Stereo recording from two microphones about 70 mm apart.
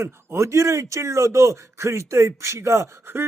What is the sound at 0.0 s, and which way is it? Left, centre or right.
A man's voice, right.